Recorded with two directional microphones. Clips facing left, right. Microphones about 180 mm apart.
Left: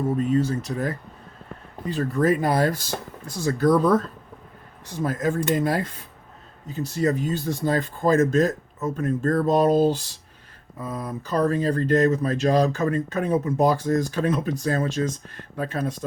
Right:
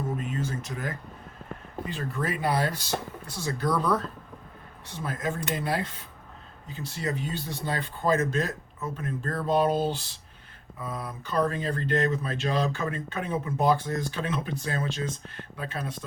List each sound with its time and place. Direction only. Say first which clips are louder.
0.2 s speech: left 10 dB; 35° left (ahead or behind)